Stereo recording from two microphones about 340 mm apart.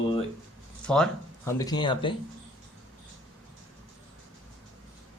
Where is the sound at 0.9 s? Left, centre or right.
Centre.